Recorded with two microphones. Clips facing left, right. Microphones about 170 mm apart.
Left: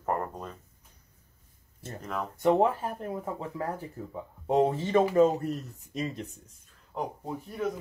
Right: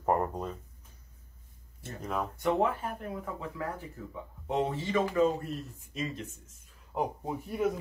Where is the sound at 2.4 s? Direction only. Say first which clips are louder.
Left 5 dB; 35° left (ahead or behind).